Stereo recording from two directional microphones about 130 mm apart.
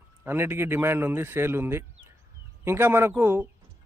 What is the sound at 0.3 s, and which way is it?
A man's voice, 20° right (ahead or behind).